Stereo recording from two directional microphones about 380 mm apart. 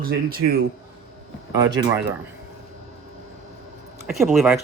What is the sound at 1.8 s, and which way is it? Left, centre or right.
Speech, centre.